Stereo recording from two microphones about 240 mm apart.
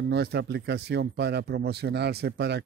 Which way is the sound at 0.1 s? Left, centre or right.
Right.